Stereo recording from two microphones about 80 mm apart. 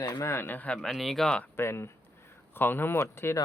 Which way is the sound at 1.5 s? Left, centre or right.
Left.